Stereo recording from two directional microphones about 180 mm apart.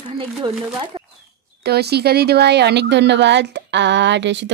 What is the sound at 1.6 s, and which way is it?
Speech, 65° right (ahead or behind).